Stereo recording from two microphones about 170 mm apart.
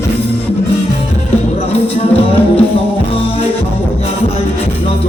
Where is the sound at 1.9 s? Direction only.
35° left (ahead or behind).